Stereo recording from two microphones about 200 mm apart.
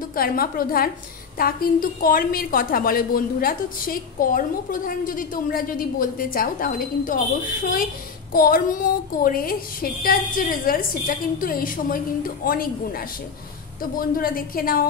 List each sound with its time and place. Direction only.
0.1 s a woman's voice: 45° left (ahead or behind)
13.9 s a woman's voice: 45° left (ahead or behind)